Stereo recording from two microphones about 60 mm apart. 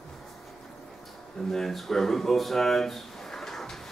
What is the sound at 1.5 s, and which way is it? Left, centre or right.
Speech, centre.